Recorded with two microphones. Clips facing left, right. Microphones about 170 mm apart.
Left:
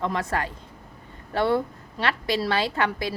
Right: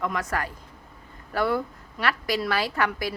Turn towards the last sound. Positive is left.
turn(degrees=25)  # may be behind; listen again after turning